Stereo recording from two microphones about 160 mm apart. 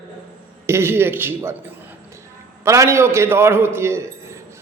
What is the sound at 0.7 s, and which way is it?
Speech, 15° right (ahead or behind).